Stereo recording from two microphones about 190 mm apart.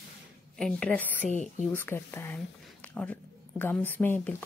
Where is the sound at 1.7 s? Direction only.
10° left (ahead or behind).